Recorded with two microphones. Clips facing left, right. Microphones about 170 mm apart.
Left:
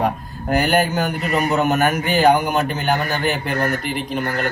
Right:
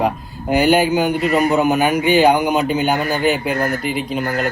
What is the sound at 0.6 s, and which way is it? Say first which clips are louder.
Speech: right 5 dB; 10° right (ahead or behind).